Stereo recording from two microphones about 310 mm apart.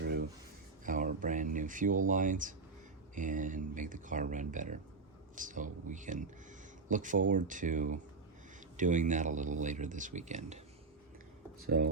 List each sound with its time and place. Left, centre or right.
0.0 s a sound: right
3.2 s speech: right
11.6 s speech: right